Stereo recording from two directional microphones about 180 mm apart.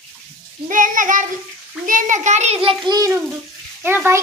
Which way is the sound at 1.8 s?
45° right (ahead or behind).